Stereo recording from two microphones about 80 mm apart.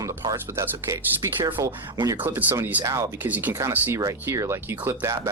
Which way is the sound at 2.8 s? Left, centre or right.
Right.